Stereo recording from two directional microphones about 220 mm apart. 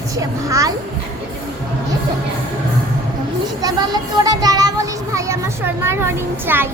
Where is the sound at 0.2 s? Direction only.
15° right (ahead or behind).